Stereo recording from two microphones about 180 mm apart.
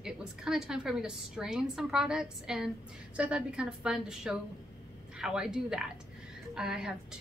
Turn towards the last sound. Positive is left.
turn(degrees=-5)  # may be behind; listen again after turning